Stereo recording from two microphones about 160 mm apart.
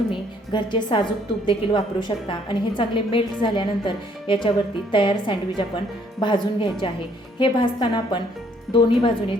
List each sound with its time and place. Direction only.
0.1 s a woman's voice: 30° left (ahead or behind)